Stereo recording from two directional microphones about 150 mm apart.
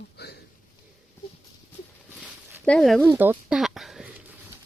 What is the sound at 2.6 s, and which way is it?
Speech, 5° left (ahead or behind).